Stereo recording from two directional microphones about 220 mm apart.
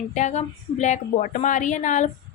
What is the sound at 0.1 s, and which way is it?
A woman's voice, 30° left (ahead or behind).